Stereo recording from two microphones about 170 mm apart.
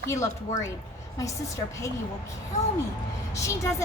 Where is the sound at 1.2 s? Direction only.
20° left (ahead or behind).